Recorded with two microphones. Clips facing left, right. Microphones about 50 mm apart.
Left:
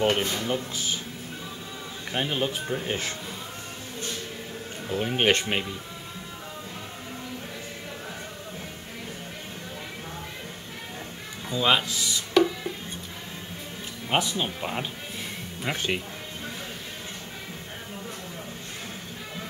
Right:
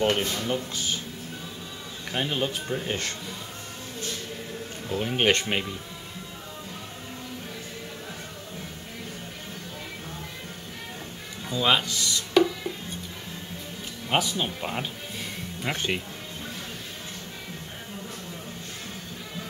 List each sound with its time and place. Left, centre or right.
0.2 s speech: left
0.5 s speech: centre
2.1 s speech: centre
4.8 s speech: centre
11.4 s speech: centre
14.0 s speech: centre